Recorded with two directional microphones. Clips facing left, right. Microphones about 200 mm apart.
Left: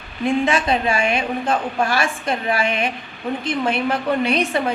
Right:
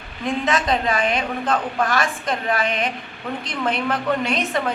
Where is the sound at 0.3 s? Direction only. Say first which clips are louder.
Left 3 dB; 10° left (ahead or behind).